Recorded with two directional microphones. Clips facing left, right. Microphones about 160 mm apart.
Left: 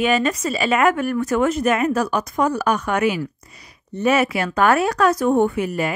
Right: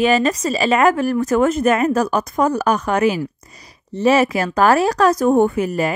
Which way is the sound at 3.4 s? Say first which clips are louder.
Right 2 dB; 40° right (ahead or behind).